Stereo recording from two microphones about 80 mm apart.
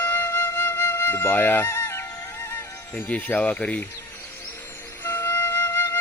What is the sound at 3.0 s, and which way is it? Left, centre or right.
Speech, centre.